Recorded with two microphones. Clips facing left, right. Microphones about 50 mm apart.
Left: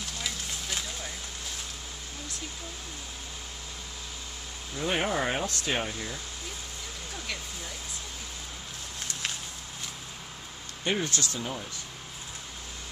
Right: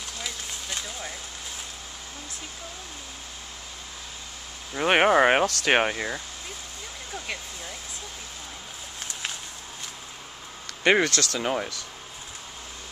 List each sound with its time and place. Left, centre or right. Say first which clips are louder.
4.7 s speech: right 9 dB; right
10.8 s speech: right 9 dB; right